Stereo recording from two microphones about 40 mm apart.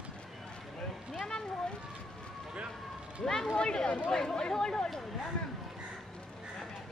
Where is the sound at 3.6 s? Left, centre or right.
Left.